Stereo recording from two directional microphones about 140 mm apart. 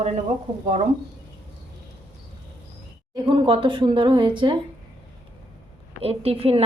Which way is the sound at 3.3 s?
35° right (ahead or behind).